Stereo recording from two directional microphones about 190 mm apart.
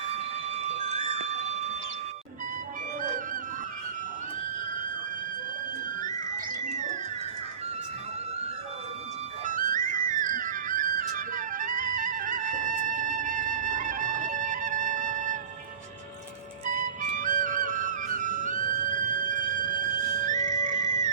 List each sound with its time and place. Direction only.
0.6 s music: 35° right (ahead or behind)
6.0 s music: 45° right (ahead or behind)
9.4 s music: 45° right (ahead or behind)
16.7 s music: 45° right (ahead or behind)